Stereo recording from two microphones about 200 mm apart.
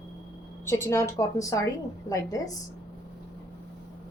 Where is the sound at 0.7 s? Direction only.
15° left (ahead or behind).